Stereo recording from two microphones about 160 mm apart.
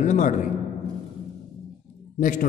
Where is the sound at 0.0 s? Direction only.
50° left (ahead or behind).